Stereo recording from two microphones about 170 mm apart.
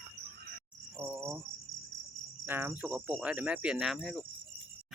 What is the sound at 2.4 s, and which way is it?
Cricket, 10° right (ahead or behind).